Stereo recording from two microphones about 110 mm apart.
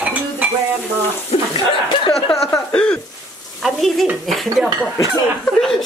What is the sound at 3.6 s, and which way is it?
Speech, centre (ahead or behind).